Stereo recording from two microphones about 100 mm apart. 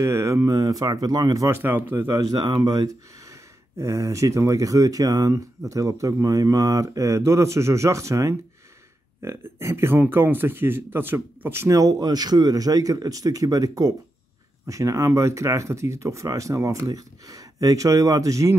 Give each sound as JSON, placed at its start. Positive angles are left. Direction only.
{"t": 0.0, "sound": "speech", "side_deg": -30}
{"t": 1.6, "sound": "speech", "side_deg": -20}
{"t": 2.3, "sound": "speech", "side_deg": -40}